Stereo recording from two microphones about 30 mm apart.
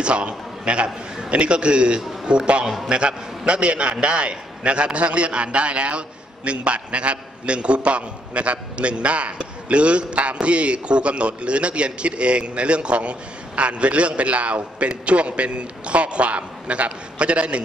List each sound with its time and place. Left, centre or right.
0.0 s a man's voice: right